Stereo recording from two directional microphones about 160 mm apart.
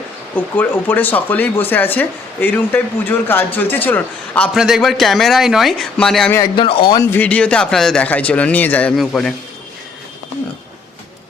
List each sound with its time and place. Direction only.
0.3 s speech: 10° left (ahead or behind)
4.5 s a man's voice: 5° right (ahead or behind)
6.3 s speech: 30° left (ahead or behind)
7.0 s speech: 10° left (ahead or behind)